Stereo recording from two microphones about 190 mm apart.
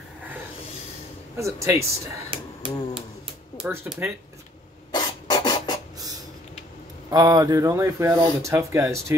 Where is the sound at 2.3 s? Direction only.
30° right (ahead or behind).